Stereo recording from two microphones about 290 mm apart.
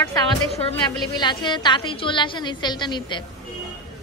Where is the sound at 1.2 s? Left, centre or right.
Centre.